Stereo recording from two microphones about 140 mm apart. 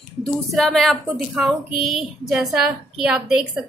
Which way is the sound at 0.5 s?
Centre (ahead or behind).